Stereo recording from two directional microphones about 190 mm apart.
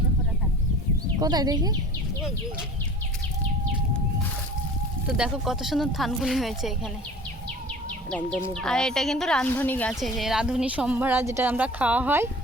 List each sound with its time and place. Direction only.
1.2 s speech: 20° right (ahead or behind)
5.0 s speech: 5° right (ahead or behind)
8.5 s speech: 5° left (ahead or behind)
9.9 s speech: centre (ahead or behind)